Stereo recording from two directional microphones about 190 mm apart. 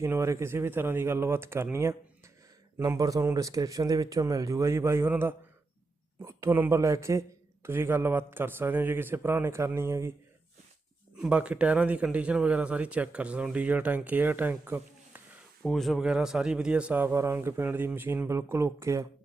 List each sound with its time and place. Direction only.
0.0 s a man's voice: 15° right (ahead or behind)
11.2 s a man's voice: 5° right (ahead or behind)
15.6 s a man's voice: centre (ahead or behind); by 19.0 s 15° right (ahead or behind)